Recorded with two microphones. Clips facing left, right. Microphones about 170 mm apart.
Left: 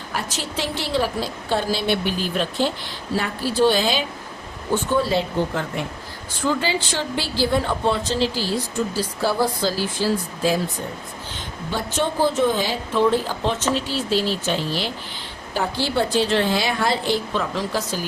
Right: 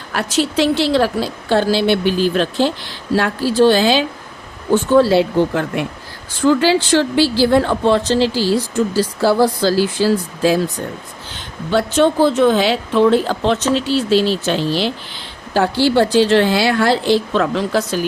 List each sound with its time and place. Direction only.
0.1 s a woman's voice: 75° right (ahead or behind); by 10.6 s 90° right
11.7 s a woman's voice: 75° right (ahead or behind)